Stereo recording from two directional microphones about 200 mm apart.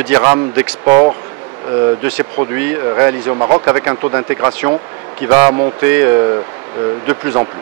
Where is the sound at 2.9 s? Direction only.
20° right (ahead or behind).